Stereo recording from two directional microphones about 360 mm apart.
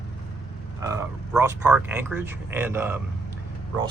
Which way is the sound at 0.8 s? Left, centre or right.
Centre.